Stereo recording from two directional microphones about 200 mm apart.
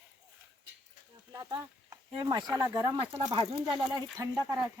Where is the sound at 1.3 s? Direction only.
15° right (ahead or behind).